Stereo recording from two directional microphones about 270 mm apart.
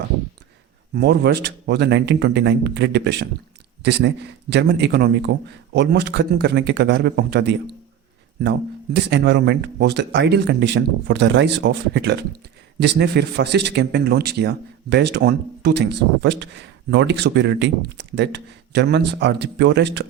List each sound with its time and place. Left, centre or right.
0.9 s speech: right